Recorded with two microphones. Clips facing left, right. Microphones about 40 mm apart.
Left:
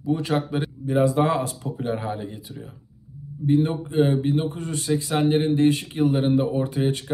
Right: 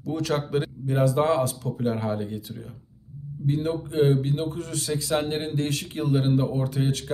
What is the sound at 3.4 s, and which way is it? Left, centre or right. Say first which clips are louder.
Speech: left 5 dB; left.